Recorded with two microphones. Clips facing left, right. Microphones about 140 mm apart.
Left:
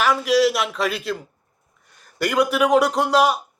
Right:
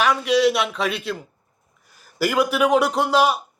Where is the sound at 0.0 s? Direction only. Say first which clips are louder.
Even; centre (ahead or behind).